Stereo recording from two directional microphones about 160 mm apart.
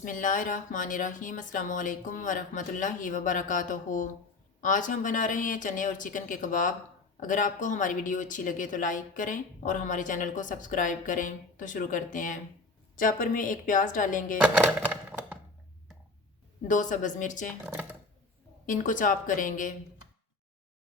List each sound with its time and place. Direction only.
0.0 s speech: 55° left (ahead or behind)
14.4 s music: 10° right (ahead or behind)
16.6 s speech: 50° left (ahead or behind)
18.6 s speech: 55° left (ahead or behind)